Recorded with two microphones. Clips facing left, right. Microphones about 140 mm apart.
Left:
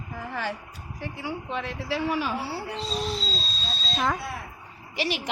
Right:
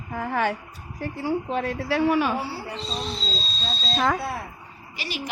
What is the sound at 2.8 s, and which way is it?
Speech, centre (ahead or behind).